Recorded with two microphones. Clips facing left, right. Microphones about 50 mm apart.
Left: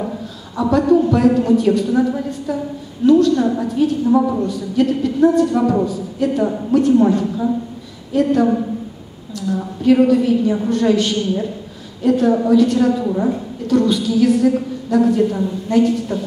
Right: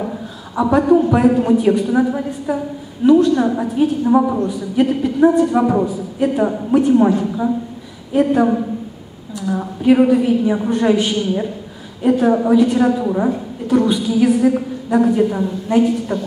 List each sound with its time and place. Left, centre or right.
0.6 s a woman's voice: right
9.6 s a woman's voice: right
13.0 s a woman's voice: right
13.3 s a woman's voice: centre